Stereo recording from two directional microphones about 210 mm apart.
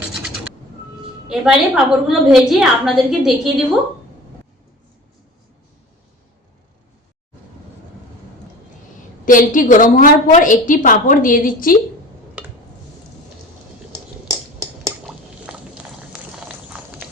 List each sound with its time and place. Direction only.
1.3 s a woman's voice: 5° right (ahead or behind)
9.2 s a woman's voice: 40° left (ahead or behind)
15.0 s liquid: 5° right (ahead or behind)
16.3 s a sound: 5° right (ahead or behind)